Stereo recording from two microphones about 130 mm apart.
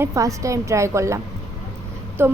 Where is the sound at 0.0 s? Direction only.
25° right (ahead or behind).